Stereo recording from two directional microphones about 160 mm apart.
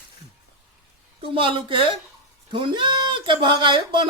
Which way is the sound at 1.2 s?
35° right (ahead or behind).